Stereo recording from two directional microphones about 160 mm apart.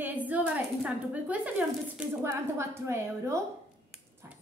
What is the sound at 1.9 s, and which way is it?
Speech, 15° right (ahead or behind).